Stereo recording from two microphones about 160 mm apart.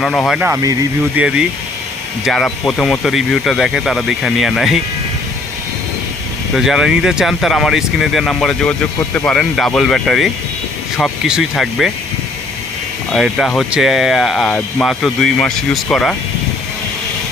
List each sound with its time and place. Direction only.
0.0 s speech: 5° left (ahead or behind)
0.3 s speech: 10° right (ahead or behind)
0.6 s speech: 20° right (ahead or behind)
1.1 s speech: 5° right (ahead or behind)
6.5 s speech: centre (ahead or behind)
13.1 s speech: centre (ahead or behind)